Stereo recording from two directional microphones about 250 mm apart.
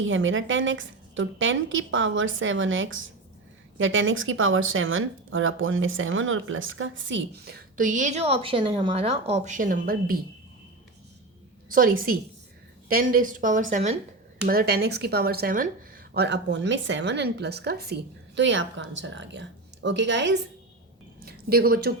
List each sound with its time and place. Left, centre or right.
0.1 s speech: right
11.7 s speech: right